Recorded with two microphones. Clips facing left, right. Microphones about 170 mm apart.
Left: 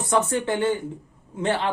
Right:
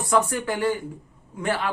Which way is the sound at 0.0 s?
25° left (ahead or behind).